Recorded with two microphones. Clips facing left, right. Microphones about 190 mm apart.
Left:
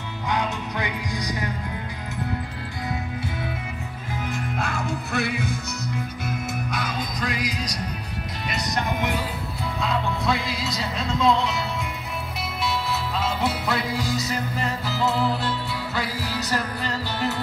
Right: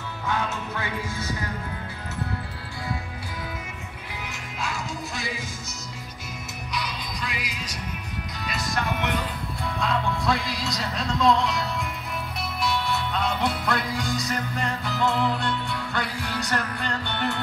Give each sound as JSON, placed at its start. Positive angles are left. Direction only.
{"t": 0.3, "sound": "music", "side_deg": 15}
{"t": 4.6, "sound": "music", "side_deg": 60}
{"t": 6.7, "sound": "music", "side_deg": 50}
{"t": 8.5, "sound": "speech", "side_deg": 20}
{"t": 9.8, "sound": "music", "side_deg": 0}
{"t": 12.6, "sound": "music", "side_deg": 0}